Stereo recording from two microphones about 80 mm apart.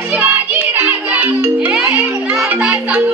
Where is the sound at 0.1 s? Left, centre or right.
Right.